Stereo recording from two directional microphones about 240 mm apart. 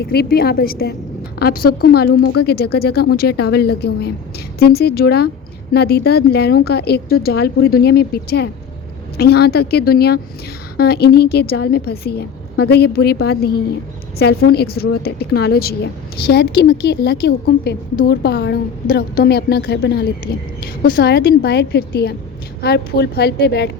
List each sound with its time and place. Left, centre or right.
0.0 s a woman's voice: left